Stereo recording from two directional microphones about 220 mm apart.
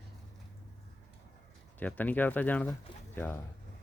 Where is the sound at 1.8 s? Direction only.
5° left (ahead or behind).